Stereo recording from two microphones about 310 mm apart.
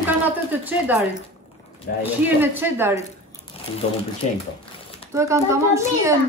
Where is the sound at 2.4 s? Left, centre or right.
Centre.